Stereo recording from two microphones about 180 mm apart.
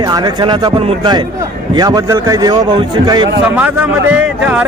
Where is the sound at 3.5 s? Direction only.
10° right (ahead or behind).